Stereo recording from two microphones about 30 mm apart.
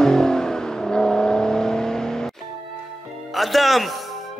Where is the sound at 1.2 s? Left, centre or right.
Centre.